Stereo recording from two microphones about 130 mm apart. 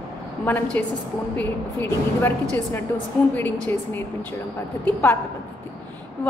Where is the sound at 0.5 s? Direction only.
15° left (ahead or behind).